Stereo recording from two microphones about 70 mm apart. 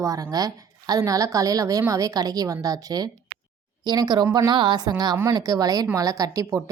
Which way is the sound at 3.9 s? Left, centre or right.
Right.